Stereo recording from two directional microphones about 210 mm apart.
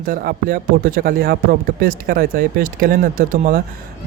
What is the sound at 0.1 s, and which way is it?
Speech, 45° right (ahead or behind).